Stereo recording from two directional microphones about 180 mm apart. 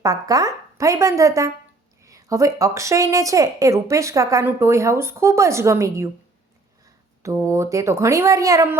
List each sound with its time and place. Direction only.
0.0 s a woman's voice: 20° right (ahead or behind)
7.2 s speech: 15° right (ahead or behind)